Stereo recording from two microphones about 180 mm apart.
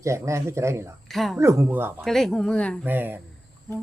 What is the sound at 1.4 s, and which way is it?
Speech, 15° right (ahead or behind).